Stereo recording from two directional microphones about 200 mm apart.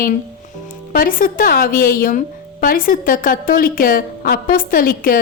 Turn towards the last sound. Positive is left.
turn(degrees=45)  # may be behind; listen again after turning